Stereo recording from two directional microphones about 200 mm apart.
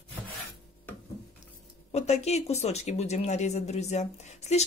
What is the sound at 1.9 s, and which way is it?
Speech, 35° left (ahead or behind).